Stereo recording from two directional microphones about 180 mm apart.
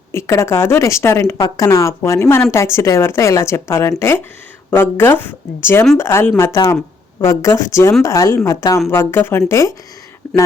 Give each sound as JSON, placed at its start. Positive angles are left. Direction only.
{"t": 0.1, "sound": "speech", "side_deg": 15}